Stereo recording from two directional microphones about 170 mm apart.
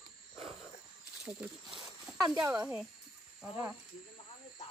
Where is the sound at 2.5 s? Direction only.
15° right (ahead or behind).